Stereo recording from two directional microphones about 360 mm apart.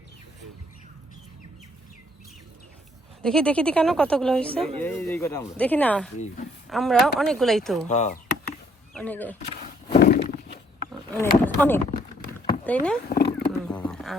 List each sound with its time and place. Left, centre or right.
3.2 s speech: centre
6.1 s speech: centre
6.7 s speech: centre
7.9 s a sound: centre
8.9 s speech: centre
9.5 s a sound: centre
11.1 s speech: centre
13.1 s wild animals: left
13.4 s a sound: centre